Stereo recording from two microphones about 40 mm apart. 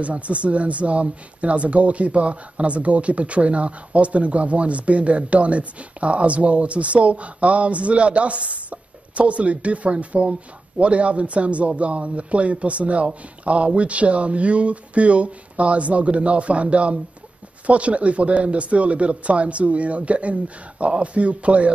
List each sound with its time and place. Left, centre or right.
0.0 s speech: right